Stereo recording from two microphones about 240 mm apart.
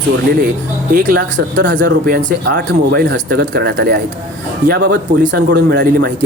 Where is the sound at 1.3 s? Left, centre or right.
Right.